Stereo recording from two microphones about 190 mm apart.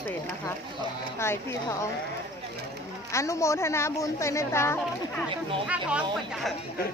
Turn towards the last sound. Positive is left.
turn(degrees=-5)  # may be behind; listen again after turning